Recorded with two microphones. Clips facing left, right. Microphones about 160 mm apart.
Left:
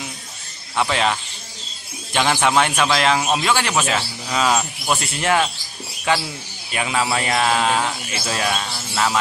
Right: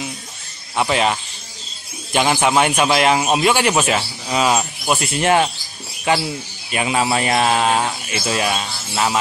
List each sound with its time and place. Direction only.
0.7 s a man's voice: 10° right (ahead or behind)
2.1 s a man's voice: 10° right (ahead or behind)
6.7 s a man's voice: 20° right (ahead or behind)
8.3 s a man's voice: 15° right (ahead or behind)